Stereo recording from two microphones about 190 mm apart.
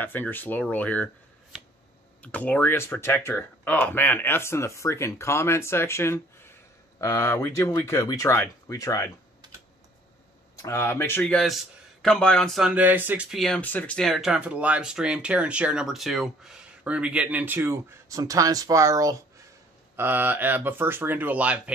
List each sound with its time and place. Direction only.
0.0 s speech: 10° left (ahead or behind)
2.2 s speech: 10° left (ahead or behind)
10.6 s a man's voice: 15° left (ahead or behind); by 21.7 s 5° right (ahead or behind)